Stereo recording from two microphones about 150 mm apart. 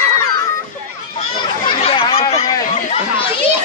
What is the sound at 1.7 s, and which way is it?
Chatter, 35° left (ahead or behind).